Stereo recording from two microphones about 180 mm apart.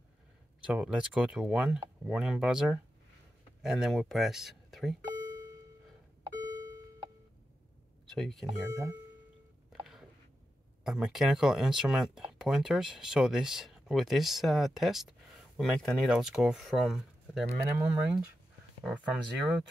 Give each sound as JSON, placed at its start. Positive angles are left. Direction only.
{"t": 0.7, "sound": "speech", "side_deg": -5}
{"t": 5.0, "sound": "doorbell", "side_deg": -20}
{"t": 6.3, "sound": "a sound", "side_deg": -20}
{"t": 8.1, "sound": "speech", "side_deg": 0}
{"t": 8.6, "sound": "speech", "side_deg": -20}
{"t": 10.8, "sound": "speech", "side_deg": 0}